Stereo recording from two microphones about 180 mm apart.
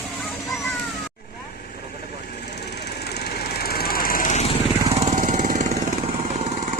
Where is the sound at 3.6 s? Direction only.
60° left (ahead or behind); by 4.5 s 40° left (ahead or behind).